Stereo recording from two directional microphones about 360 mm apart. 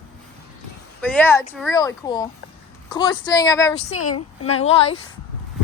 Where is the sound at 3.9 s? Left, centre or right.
Left.